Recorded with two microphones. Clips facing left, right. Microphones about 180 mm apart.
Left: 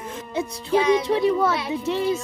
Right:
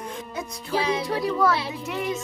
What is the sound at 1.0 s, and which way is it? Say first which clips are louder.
Speech: left 3 dB; 25° left (ahead or behind).